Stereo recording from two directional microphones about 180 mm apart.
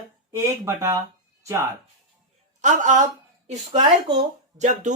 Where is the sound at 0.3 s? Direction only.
15° right (ahead or behind).